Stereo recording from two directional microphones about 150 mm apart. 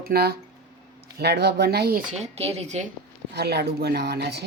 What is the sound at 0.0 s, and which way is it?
A woman's voice, 90° right.